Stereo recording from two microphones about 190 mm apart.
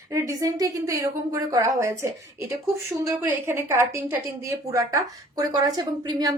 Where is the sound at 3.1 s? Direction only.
15° right (ahead or behind).